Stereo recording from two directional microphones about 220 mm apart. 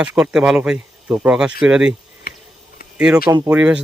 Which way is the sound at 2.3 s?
45° left (ahead or behind).